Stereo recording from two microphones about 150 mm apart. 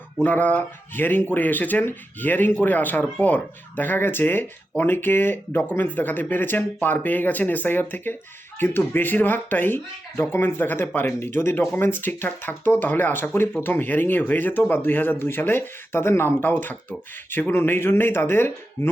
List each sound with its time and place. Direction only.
0.2 s speech: 10° left (ahead or behind)